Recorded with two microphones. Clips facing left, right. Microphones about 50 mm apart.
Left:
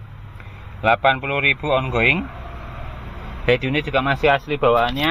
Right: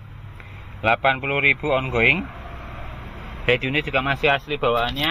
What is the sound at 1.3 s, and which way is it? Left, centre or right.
Speech, right.